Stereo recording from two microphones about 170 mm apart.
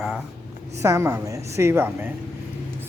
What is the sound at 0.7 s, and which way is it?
A woman's voice, 15° right (ahead or behind).